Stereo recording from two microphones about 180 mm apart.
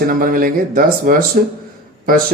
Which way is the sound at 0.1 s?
50° right (ahead or behind).